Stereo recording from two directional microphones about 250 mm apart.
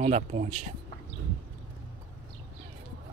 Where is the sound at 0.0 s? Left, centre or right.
Right.